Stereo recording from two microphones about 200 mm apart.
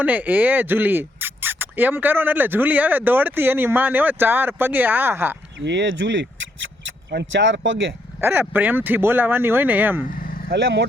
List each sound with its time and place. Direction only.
0.0 s speech: 10° right (ahead or behind)
5.5 s speech: 60° right (ahead or behind)
8.2 s speech: 10° right (ahead or behind)
10.2 s vehicle: 45° left (ahead or behind)
10.5 s speech: 60° right (ahead or behind)